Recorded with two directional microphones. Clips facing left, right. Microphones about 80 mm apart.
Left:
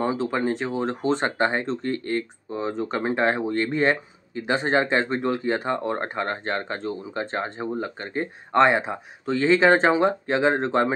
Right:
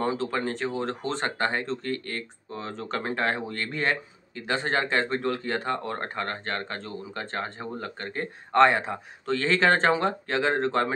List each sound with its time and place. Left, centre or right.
0.0 s speech: centre